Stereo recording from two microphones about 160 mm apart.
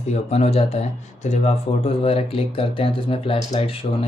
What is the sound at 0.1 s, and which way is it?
Speech, 40° left (ahead or behind).